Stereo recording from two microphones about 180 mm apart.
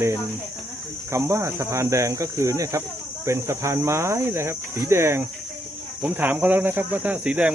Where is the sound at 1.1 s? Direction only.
15° right (ahead or behind).